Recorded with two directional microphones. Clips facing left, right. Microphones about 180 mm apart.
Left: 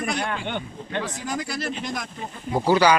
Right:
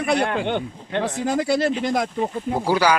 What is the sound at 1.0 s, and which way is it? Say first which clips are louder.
Speech: right 7 dB; 60° right (ahead or behind).